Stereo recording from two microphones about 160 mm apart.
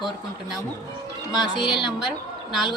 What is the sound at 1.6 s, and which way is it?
Speech, 30° left (ahead or behind).